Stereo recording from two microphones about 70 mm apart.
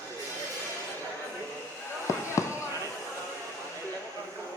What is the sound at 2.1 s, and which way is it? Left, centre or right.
Fireworks, left.